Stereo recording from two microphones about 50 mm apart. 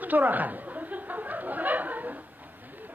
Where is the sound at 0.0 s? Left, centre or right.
Right.